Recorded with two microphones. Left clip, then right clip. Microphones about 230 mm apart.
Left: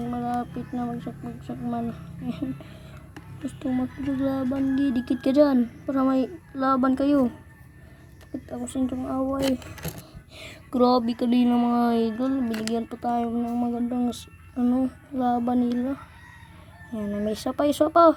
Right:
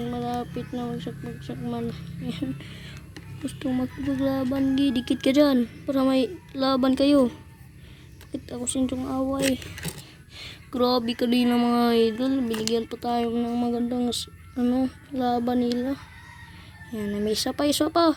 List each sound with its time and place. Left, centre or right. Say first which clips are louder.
0.1 s speech: left 4 dB; centre
3.4 s speech: even; centre
8.4 s speech: right 1 dB; centre
10.3 s a sound: right 1 dB; centre
10.8 s speech: left 2 dB; centre